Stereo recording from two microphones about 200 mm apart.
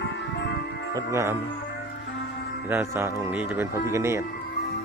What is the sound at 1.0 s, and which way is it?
Speech, 15° right (ahead or behind).